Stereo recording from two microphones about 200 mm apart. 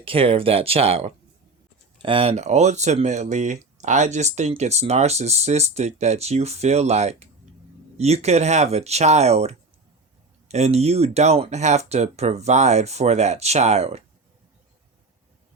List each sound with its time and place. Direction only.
0.0 s speech: 30° right (ahead or behind)